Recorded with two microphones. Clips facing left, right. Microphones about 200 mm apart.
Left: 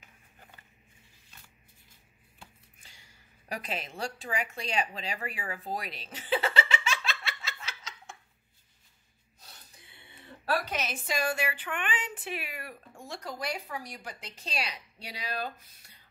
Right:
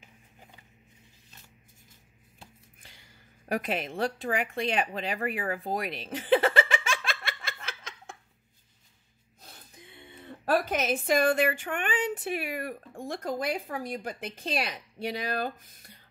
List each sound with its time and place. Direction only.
3.4 s a woman's voice: 50° right (ahead or behind)
5.7 s giggle: 50° right (ahead or behind)
10.4 s a woman's voice: 50° right (ahead or behind)